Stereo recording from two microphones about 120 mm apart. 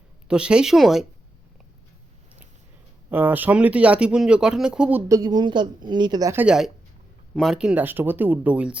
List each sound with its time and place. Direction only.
0.3 s speech: 5° right (ahead or behind)
3.1 s speech: 15° right (ahead or behind)
5.0 s a woman's voice: 30° right (ahead or behind)
6.3 s speech: 10° right (ahead or behind)